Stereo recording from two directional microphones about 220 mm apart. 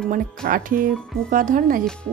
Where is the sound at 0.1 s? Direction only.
40° right (ahead or behind).